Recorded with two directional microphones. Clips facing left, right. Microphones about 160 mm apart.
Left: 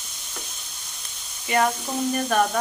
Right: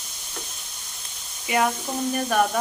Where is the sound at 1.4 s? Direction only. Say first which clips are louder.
Left 1 dB; 5° right (ahead or behind).